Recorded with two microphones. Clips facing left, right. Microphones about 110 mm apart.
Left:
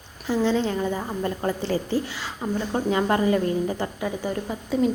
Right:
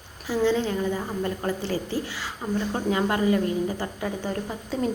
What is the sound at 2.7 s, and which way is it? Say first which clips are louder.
A woman's voice: left 4 dB; 30° left (ahead or behind).